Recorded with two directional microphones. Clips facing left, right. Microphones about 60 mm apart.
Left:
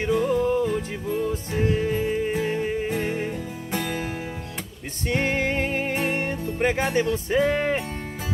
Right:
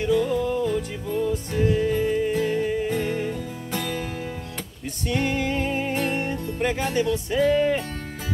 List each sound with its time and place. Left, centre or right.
0.0 s music: left
2.9 s music: centre
5.0 s music: left
5.9 s music: left